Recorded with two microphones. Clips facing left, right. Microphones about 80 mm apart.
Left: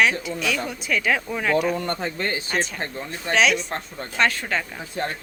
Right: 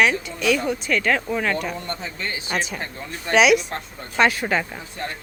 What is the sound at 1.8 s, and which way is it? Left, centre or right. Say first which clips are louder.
Speech: left 4 dB; left.